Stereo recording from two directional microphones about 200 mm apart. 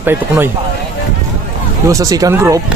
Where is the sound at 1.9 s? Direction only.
15° right (ahead or behind).